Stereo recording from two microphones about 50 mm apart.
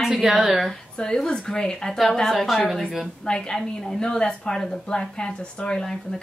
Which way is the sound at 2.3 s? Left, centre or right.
Centre.